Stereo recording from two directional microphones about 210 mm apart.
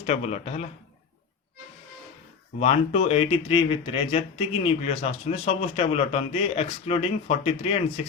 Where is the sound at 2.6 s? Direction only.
30° left (ahead or behind).